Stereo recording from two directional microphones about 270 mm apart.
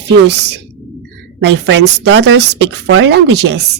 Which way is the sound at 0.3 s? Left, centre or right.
Right.